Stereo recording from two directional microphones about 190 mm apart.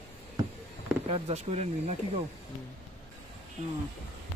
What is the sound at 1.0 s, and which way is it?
Speech, 30° right (ahead or behind).